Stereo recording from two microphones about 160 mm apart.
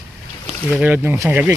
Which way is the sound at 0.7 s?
10° right (ahead or behind).